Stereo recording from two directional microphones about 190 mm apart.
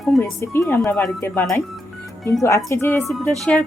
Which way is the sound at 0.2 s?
15° left (ahead or behind).